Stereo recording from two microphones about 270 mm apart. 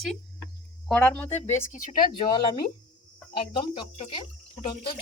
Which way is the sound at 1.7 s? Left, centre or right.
Left.